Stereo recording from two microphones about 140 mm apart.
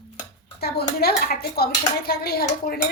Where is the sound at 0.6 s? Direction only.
90° left.